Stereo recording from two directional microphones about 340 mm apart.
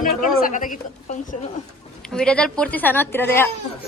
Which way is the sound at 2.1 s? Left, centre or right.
Centre.